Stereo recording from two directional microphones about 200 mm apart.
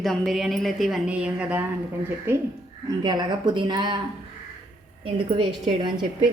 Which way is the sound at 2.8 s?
20° right (ahead or behind).